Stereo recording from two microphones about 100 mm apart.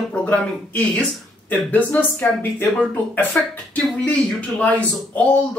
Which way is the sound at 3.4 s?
15° left (ahead or behind).